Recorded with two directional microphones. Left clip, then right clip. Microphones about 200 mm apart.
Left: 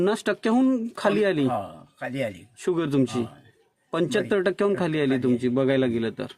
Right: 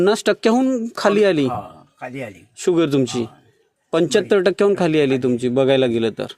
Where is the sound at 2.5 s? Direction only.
20° right (ahead or behind).